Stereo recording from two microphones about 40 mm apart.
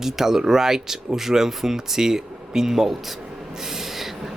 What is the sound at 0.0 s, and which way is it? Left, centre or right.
A man's voice, centre.